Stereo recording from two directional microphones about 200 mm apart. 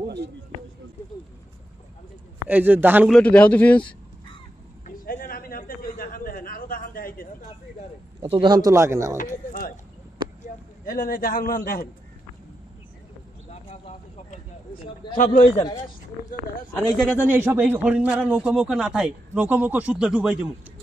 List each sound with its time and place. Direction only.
2.4 s a man's voice: 10° right (ahead or behind)
3.1 s speech: 5° left (ahead or behind)
4.8 s a sound: 45° left (ahead or behind)
8.2 s speech: 25° right (ahead or behind)
10.9 s a man's voice: 45° left (ahead or behind)
13.5 s a sound: 30° left (ahead or behind)
15.1 s a man's voice: 40° left (ahead or behind)
17.0 s a man's voice: 5° right (ahead or behind)